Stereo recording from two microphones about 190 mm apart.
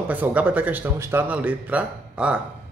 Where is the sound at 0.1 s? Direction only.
10° right (ahead or behind).